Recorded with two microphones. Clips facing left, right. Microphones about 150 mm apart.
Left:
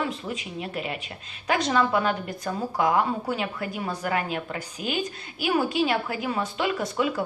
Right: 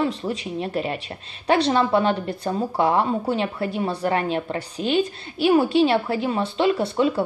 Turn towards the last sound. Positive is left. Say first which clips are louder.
# right 6 dB
turn(degrees=-30)  # may be behind; listen again after turning